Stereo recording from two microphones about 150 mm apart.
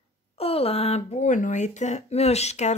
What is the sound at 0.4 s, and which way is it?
Speech, 40° left (ahead or behind).